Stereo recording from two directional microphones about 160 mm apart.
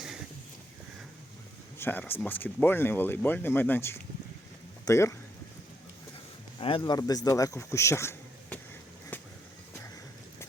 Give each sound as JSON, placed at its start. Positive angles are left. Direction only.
{"t": 1.8, "sound": "speech", "side_deg": 15}
{"t": 6.6, "sound": "speech", "side_deg": 35}